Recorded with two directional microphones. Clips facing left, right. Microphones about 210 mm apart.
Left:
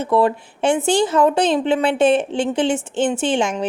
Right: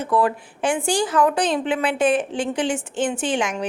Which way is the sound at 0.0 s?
25° left (ahead or behind).